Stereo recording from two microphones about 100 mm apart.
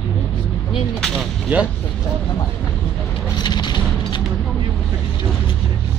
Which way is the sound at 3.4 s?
45° left (ahead or behind).